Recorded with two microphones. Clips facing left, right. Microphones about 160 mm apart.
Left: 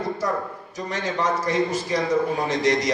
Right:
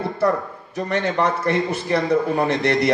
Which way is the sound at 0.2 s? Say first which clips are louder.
Right 6 dB; 60° right (ahead or behind).